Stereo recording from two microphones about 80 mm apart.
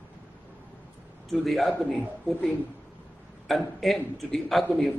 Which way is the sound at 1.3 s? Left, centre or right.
Centre.